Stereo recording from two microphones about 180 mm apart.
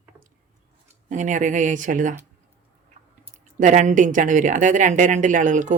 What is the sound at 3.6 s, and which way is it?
Speech, 45° right (ahead or behind).